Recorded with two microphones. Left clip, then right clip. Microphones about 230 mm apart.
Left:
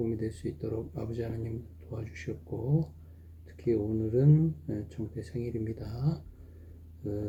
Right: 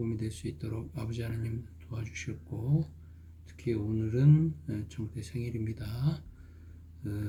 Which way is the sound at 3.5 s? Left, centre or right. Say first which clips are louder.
Left 4 dB; right.